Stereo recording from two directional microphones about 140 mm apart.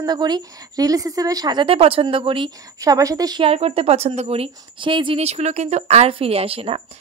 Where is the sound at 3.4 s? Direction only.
45° right (ahead or behind).